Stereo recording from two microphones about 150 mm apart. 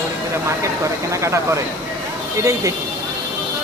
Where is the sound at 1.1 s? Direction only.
20° right (ahead or behind).